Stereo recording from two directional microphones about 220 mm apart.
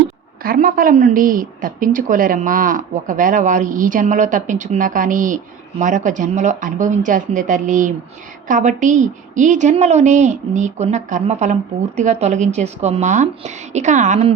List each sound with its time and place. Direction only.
0.4 s a woman's voice: 40° right (ahead or behind)